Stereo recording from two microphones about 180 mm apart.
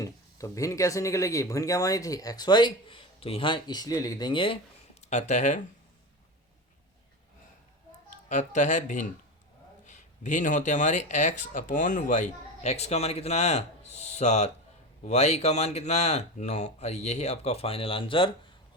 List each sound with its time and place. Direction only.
0.0 s speech: 20° left (ahead or behind)
4.9 s speech: 40° left (ahead or behind)
8.1 s speech: 45° left (ahead or behind)